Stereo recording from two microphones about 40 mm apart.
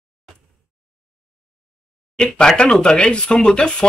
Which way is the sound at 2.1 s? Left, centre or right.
Left.